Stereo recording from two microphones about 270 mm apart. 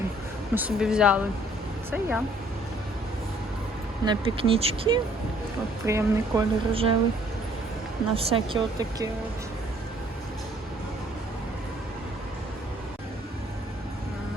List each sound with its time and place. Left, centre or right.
0.5 s speech: centre
4.0 s speech: centre
5.8 s speech: centre
8.1 s speech: right